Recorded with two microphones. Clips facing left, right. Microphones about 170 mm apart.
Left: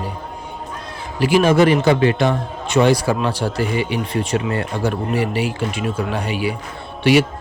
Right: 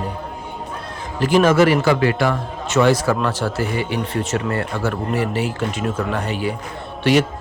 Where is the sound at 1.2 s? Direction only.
10° left (ahead or behind).